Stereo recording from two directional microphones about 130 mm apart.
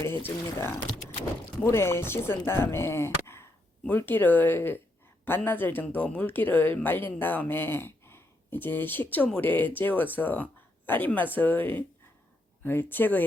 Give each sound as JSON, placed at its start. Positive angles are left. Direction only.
{"t": 0.0, "sound": "speech", "side_deg": 15}